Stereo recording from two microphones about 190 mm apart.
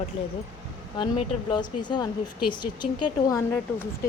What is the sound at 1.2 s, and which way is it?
Speech, 25° left (ahead or behind).